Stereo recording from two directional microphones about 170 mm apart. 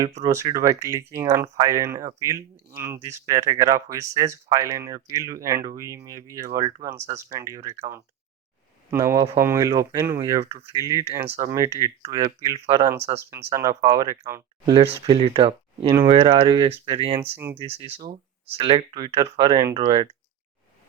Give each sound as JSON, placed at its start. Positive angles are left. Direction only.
{"t": 0.2, "sound": "speech", "side_deg": -20}
{"t": 12.0, "sound": "speech", "side_deg": -35}
{"t": 14.7, "sound": "speech", "side_deg": -30}
{"t": 17.3, "sound": "speech", "side_deg": -15}
{"t": 17.7, "sound": "speech", "side_deg": -35}